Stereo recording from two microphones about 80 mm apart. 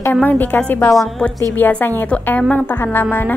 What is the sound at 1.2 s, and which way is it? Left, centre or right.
Speech, centre.